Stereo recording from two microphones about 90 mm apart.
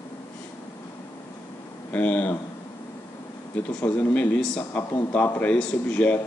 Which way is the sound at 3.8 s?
15° left (ahead or behind).